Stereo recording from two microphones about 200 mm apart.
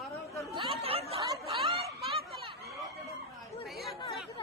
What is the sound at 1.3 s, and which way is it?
Speech, 15° right (ahead or behind).